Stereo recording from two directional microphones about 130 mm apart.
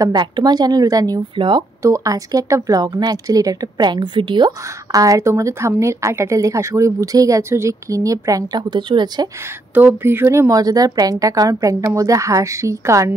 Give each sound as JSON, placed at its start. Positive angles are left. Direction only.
{"t": 0.0, "sound": "speech", "side_deg": -30}
{"t": 1.8, "sound": "speech", "side_deg": -25}
{"t": 9.8, "sound": "speech", "side_deg": -15}